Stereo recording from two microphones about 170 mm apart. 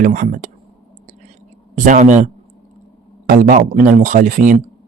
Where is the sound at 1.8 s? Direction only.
45° right (ahead or behind).